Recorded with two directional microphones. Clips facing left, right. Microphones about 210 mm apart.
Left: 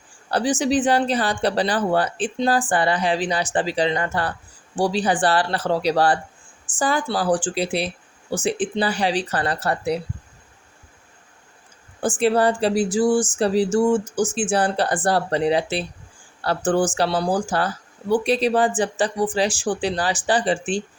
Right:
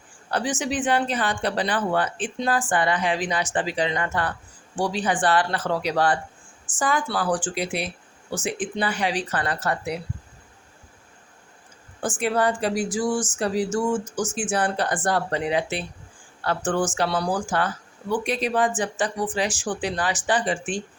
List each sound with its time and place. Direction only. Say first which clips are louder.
0.3 s speech: left 5 dB; 35° left (ahead or behind)
11.9 s speech: left 5 dB; 30° left (ahead or behind)